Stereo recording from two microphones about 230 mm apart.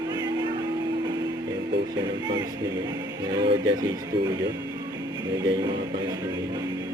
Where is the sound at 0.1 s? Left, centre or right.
Centre.